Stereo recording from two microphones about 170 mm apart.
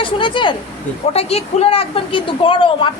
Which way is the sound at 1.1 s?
35° left (ahead or behind).